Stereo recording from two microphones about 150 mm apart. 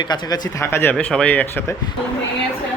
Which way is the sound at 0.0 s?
30° left (ahead or behind).